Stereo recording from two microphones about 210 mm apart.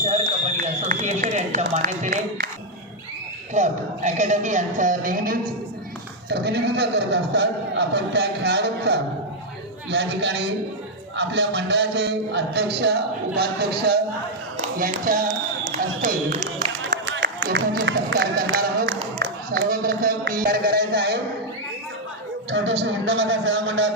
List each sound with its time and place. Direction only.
0.0 s run: 35° right (ahead or behind)
1.7 s a man's voice: 40° right (ahead or behind)
3.5 s a man's voice: 35° right (ahead or behind)
17.1 s music: 55° right (ahead or behind)
17.5 s a man's voice: 50° right (ahead or behind)
22.4 s a man's voice: 60° right (ahead or behind)